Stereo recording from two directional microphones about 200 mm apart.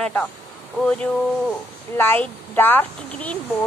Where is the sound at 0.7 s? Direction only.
5° left (ahead or behind).